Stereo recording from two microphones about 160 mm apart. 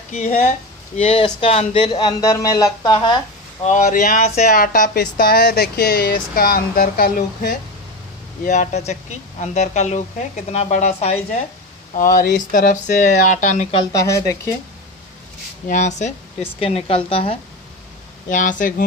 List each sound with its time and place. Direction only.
0.1 s speech: 45° left (ahead or behind)
3.6 s speech: 55° left (ahead or behind)
4.2 s speech: 45° left (ahead or behind)
4.6 s speech: 60° left (ahead or behind)
8.5 s speech: 45° left (ahead or behind)
11.9 s speech: 60° left (ahead or behind)
13.9 s speech: 20° left (ahead or behind)
15.7 s speech: 45° left (ahead or behind)
16.5 s a woman's voice: 35° left (ahead or behind)
18.3 s speech: 55° left (ahead or behind)